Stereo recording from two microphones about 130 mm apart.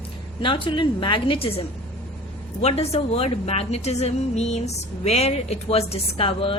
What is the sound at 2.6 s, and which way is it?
A woman's voice, 50° left (ahead or behind).